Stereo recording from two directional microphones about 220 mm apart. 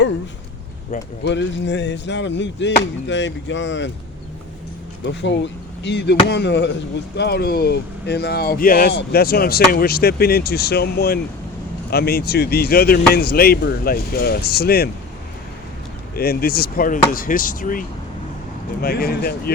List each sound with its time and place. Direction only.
1.2 s speech: 55° left (ahead or behind)
5.0 s speech: 55° left (ahead or behind)
16.1 s speech: 45° left (ahead or behind)